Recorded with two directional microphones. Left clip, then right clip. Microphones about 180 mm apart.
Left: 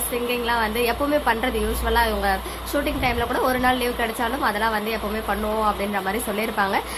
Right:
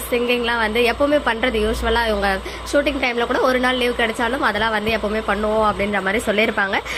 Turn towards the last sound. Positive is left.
turn(degrees=-15)  # may be behind; listen again after turning